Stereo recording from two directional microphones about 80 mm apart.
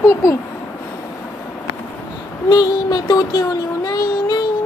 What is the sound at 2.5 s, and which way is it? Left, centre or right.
Child singing, left.